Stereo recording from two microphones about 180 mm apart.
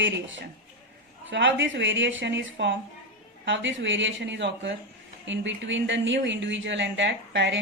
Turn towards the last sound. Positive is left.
turn(degrees=-90)